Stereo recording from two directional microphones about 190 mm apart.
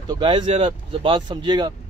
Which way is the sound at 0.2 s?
25° right (ahead or behind).